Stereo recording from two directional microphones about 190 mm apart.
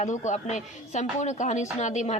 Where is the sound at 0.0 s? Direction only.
40° left (ahead or behind).